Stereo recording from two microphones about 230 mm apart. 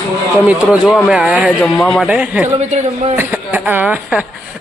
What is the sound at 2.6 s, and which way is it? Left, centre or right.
Speech, right.